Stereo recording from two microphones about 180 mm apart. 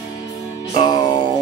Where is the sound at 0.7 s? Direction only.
25° left (ahead or behind).